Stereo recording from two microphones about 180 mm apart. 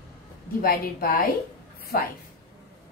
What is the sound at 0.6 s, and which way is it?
A woman's voice, 55° left (ahead or behind).